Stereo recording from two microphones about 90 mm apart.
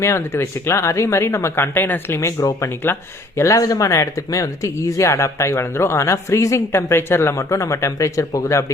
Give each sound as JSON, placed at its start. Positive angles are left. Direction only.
{"t": 0.0, "sound": "speech", "side_deg": 30}
{"t": 2.4, "sound": "speech", "side_deg": 40}
{"t": 2.8, "sound": "speech", "side_deg": 25}